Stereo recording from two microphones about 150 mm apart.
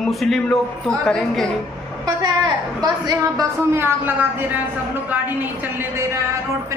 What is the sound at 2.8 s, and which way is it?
A woman's voice, 25° right (ahead or behind).